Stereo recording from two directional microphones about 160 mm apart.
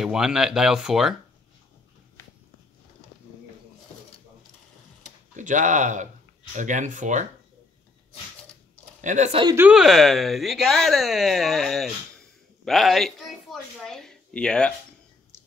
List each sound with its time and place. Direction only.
0.0 s speech: 5° right (ahead or behind)
5.3 s speech: 50° right (ahead or behind)
9.0 s speech: 50° right (ahead or behind)
9.6 s speech: 5° right (ahead or behind)